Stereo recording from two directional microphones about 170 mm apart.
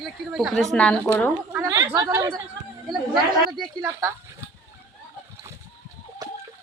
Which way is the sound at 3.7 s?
15° right (ahead or behind).